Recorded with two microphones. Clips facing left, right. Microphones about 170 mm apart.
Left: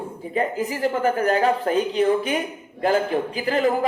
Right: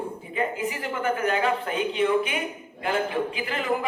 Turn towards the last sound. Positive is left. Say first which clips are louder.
# left 6 dB
turn(degrees=40)  # may be behind; listen again after turning